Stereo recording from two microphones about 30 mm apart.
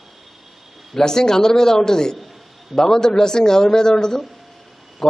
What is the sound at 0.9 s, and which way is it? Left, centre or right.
A man's voice, left.